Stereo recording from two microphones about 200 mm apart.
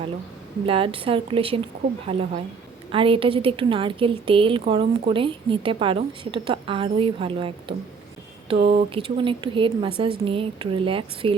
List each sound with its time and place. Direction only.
0.6 s a woman's voice: 25° right (ahead or behind)